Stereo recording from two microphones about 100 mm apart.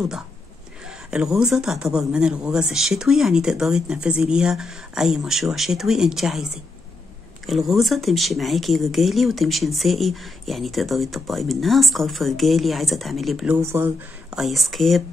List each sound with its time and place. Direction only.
0.8 s speech: 5° right (ahead or behind)
7.4 s speech: centre (ahead or behind)
13.6 s speech: 25° right (ahead or behind)
14.3 s speech: centre (ahead or behind)